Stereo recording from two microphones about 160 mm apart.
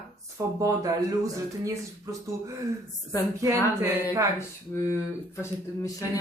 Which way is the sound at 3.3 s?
15° right (ahead or behind).